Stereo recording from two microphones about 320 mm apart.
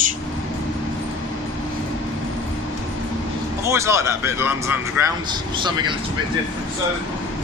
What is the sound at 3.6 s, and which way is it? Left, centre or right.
A man's voice, centre.